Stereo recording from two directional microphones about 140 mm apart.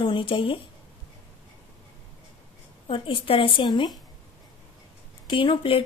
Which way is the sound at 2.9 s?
40° left (ahead or behind).